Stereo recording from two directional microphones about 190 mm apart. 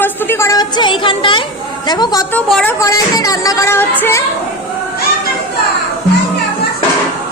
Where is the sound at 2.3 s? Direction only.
5° left (ahead or behind).